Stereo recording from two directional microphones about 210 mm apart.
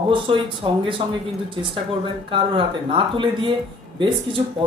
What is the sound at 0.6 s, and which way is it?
Speech, 20° right (ahead or behind).